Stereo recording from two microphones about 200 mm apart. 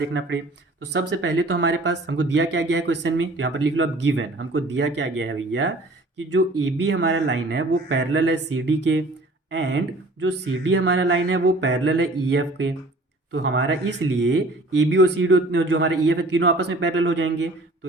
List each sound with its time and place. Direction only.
0.1 s speech: 75° right (ahead or behind)
0.9 s speech: 65° right (ahead or behind)